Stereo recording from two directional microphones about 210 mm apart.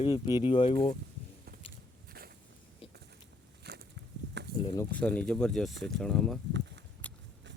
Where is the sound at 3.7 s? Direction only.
50° right (ahead or behind).